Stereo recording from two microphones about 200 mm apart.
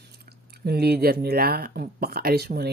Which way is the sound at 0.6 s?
55° right (ahead or behind).